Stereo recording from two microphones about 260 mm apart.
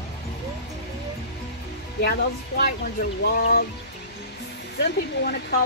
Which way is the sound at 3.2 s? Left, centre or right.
Left.